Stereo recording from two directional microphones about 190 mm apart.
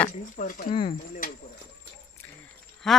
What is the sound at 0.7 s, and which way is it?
Speech, 30° left (ahead or behind).